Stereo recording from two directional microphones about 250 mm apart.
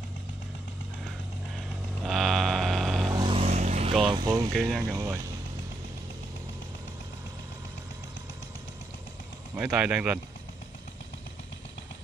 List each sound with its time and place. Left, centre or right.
2.0 s mantra: centre
3.1 s vehicle: centre
4.6 s speech: centre
4.9 s vehicle: centre
9.6 s speech: centre